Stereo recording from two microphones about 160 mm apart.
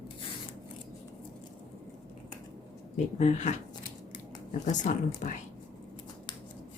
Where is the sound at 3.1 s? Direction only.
45° left (ahead or behind).